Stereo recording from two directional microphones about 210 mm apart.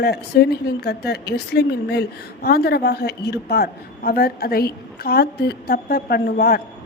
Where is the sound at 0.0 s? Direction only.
50° left (ahead or behind).